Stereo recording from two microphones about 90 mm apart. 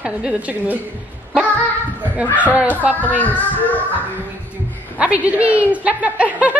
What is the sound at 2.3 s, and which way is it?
Speech, 15° right (ahead or behind).